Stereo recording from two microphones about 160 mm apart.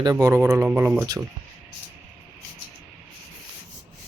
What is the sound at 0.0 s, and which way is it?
Speech, 15° right (ahead or behind).